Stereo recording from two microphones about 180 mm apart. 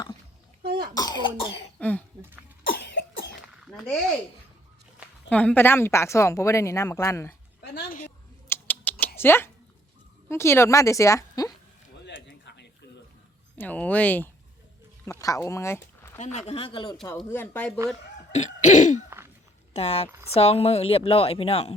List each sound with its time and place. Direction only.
0.6 s cough: 60° right (ahead or behind)
1.8 s speech: 10° left (ahead or behind)
2.6 s cough: 80° left
3.7 s a sound: 5° left (ahead or behind)
5.3 s a woman's voice: 5° left (ahead or behind)
7.6 s a sound: 60° left (ahead or behind)
8.4 s typing: 10° left (ahead or behind)
10.2 s a woman's voice: 15° left (ahead or behind)
12.0 s a sound: 80° left
13.6 s a woman's voice: 10° left (ahead or behind)
16.1 s a woman's voice: 40° left (ahead or behind)
17.2 s a woman's voice: 10° left (ahead or behind)
18.3 s throat clearing: 40° left (ahead or behind)
19.7 s a woman's voice: 35° left (ahead or behind)